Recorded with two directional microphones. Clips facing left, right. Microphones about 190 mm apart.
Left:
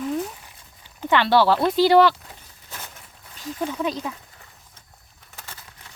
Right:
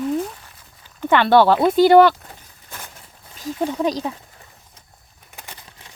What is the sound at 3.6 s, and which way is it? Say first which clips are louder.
Speech: right 5 dB; 35° right (ahead or behind).